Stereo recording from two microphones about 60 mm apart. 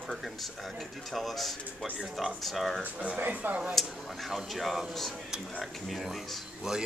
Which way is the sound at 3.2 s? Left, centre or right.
Right.